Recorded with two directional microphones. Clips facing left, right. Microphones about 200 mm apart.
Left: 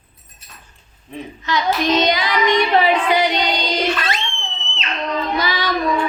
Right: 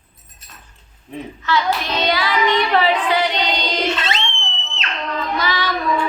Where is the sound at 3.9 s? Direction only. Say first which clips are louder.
Even; 25° right (ahead or behind).